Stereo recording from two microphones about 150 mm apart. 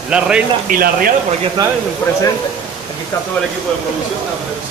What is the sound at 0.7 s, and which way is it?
Speech, 70° right (ahead or behind).